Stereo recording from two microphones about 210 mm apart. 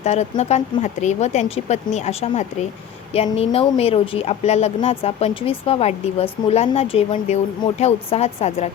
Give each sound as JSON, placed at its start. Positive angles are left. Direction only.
{"t": 0.0, "sound": "a woman's voice", "side_deg": 30}